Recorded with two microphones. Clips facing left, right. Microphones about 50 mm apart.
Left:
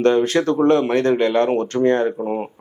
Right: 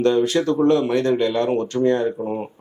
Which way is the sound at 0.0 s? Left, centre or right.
Left.